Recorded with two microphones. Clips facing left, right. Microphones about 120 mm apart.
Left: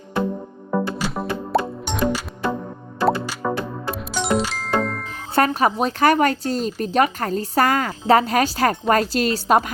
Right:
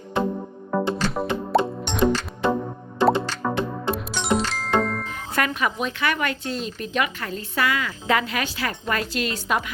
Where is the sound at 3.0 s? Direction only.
20° right (ahead or behind).